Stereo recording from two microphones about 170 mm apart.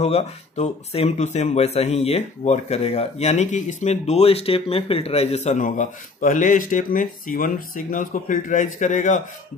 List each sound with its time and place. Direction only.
0.0 s speech: 40° left (ahead or behind)